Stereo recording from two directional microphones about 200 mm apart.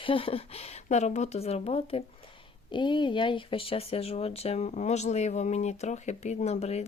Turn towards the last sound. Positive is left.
turn(degrees=30)  # may be behind; listen again after turning